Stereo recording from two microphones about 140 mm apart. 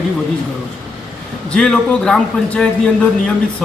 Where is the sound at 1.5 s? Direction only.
5° left (ahead or behind).